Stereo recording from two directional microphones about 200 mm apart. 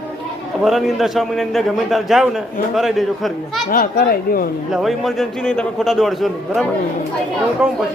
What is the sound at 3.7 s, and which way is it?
Speech, 45° left (ahead or behind).